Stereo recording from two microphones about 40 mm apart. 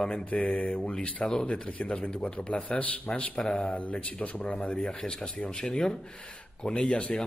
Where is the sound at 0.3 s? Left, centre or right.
Left; by 1.5 s centre.